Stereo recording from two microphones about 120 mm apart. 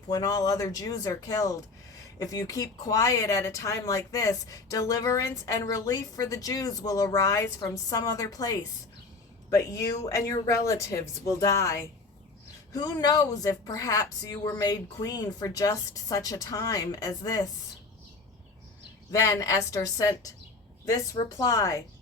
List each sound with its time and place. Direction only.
0.1 s speech: 30° left (ahead or behind)
19.1 s speech: 30° left (ahead or behind)